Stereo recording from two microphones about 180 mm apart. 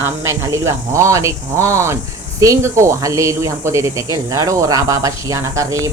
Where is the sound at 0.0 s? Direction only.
15° right (ahead or behind).